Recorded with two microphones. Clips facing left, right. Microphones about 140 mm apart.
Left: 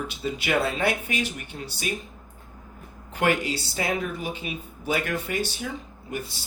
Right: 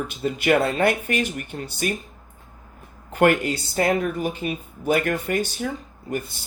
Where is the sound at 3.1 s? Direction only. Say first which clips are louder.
Right 5 dB; 50° right (ahead or behind).